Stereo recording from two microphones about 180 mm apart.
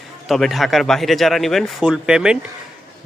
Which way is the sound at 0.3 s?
Centre (ahead or behind).